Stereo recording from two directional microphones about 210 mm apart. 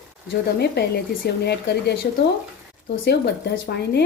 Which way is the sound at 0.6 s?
50° left (ahead or behind).